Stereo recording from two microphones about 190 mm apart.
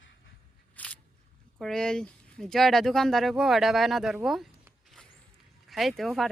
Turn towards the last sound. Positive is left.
turn(degrees=0)  # may be behind; listen again after turning